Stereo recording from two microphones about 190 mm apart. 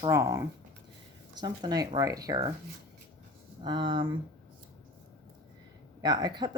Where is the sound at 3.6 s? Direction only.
25° right (ahead or behind).